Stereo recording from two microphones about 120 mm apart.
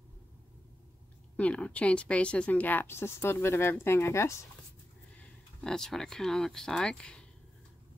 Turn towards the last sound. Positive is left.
turn(degrees=5)  # may be behind; listen again after turning